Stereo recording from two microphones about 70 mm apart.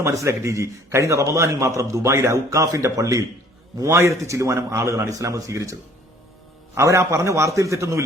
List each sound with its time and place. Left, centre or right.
0.0 s a man's voice: right
6.7 s a man's voice: right